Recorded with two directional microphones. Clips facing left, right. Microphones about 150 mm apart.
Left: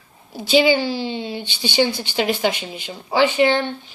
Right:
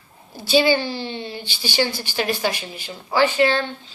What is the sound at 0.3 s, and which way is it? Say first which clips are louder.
A woman's voice: left 2 dB; 15° left (ahead or behind).